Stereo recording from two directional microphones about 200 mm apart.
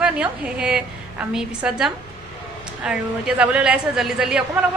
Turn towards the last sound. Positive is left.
turn(degrees=-5)  # may be behind; listen again after turning